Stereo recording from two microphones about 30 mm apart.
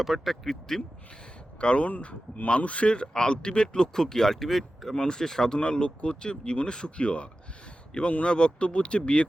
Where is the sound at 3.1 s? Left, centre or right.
Left; by 4.9 s centre.